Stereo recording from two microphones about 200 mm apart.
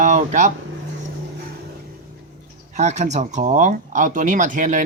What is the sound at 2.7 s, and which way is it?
Speech, 35° right (ahead or behind).